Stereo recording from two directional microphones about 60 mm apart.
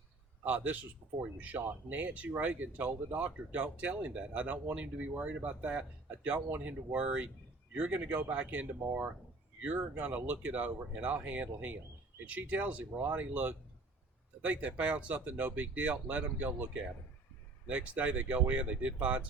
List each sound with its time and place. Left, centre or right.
0.4 s speech: right